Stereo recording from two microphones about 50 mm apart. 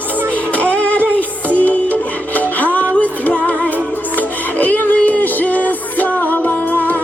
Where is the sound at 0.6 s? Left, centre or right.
Left.